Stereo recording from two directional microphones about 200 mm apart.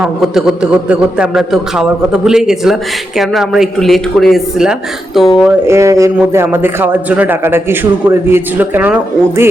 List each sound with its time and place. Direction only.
0.0 s a man's voice: centre (ahead or behind)
5.6 s a man's voice: 15° right (ahead or behind)